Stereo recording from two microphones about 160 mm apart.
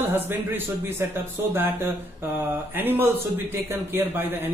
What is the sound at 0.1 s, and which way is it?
Speech, 15° right (ahead or behind).